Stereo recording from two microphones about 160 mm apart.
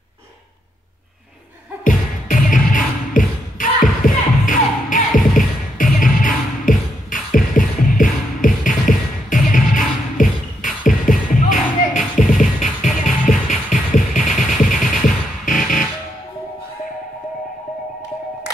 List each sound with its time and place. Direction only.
1.9 s music: 55° left (ahead or behind)